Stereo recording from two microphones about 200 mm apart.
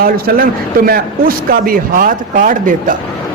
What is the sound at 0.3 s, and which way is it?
A man's voice, 50° right (ahead or behind).